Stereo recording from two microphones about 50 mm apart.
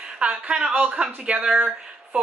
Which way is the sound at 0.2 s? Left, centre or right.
Centre.